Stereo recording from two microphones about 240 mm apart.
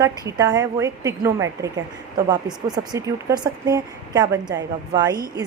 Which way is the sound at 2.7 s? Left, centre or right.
Centre.